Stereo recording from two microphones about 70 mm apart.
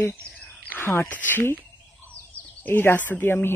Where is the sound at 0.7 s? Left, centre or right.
Left.